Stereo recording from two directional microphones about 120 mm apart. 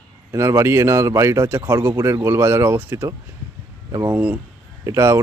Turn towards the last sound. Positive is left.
turn(degrees=-25)  # may be behind; listen again after turning